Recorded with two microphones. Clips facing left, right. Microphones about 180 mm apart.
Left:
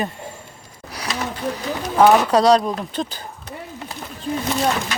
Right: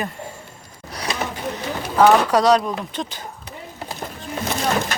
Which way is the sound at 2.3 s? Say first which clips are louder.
Left 1 dB; 30° left (ahead or behind).